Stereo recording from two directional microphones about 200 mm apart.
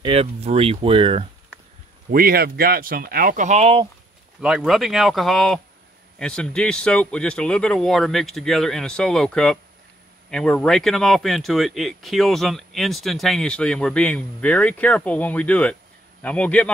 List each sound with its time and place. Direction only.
0.0 s speech: 30° right (ahead or behind)
2.0 s speech: 45° right (ahead or behind); by 3.9 s 30° right (ahead or behind)
4.4 s speech: 5° right (ahead or behind)